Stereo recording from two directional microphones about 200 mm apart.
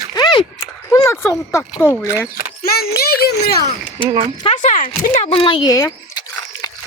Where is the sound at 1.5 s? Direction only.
10° left (ahead or behind).